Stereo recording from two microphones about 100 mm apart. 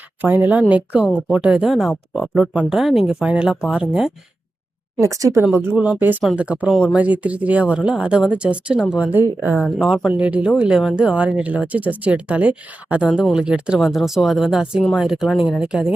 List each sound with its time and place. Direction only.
0.2 s speech: 20° right (ahead or behind); by 2.3 s centre (ahead or behind)
2.3 s speech: 10° right (ahead or behind)
4.9 s speech: 35° right (ahead or behind)
5.5 s speech: 15° right (ahead or behind)
9.6 s speech: 5° right (ahead or behind)